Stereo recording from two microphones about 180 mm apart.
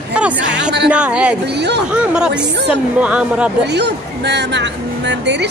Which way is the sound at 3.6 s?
70° right (ahead or behind).